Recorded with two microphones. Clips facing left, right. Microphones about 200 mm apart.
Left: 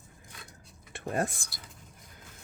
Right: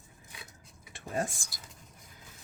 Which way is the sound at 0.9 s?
55° left (ahead or behind).